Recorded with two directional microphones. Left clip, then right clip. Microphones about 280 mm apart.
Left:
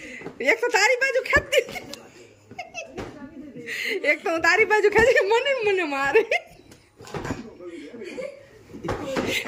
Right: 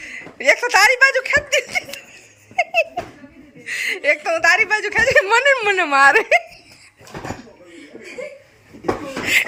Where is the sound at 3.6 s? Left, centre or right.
Centre.